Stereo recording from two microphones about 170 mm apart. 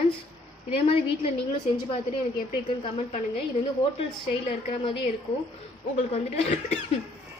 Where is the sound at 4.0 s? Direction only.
35° left (ahead or behind).